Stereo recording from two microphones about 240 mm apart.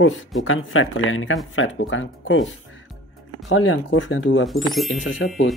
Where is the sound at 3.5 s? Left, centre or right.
Left.